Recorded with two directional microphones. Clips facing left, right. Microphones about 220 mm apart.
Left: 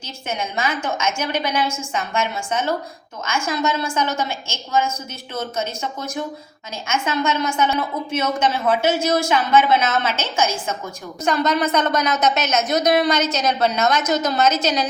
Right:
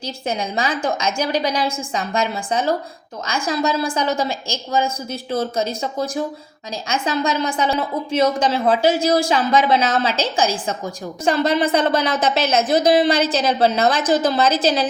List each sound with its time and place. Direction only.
0.0 s a woman's voice: 35° right (ahead or behind)